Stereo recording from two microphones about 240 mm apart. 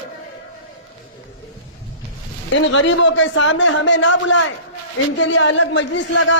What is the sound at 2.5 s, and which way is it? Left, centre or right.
A man's voice, left.